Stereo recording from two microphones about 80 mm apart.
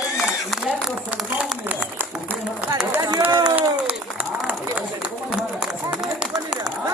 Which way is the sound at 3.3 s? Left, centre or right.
Right.